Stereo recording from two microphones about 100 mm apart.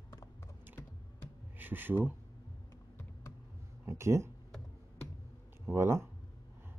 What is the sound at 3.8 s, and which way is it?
Speech, 30° right (ahead or behind).